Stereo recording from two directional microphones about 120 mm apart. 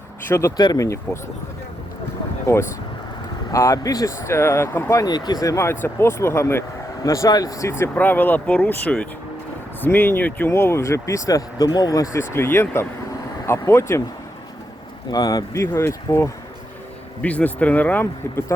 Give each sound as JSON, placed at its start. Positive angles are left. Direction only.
{"t": 0.3, "sound": "speech", "side_deg": 25}
{"t": 3.5, "sound": "speech", "side_deg": 25}
{"t": 5.0, "sound": "speech", "side_deg": 35}
{"t": 15.1, "sound": "speech", "side_deg": 35}
{"t": 17.2, "sound": "speech", "side_deg": 10}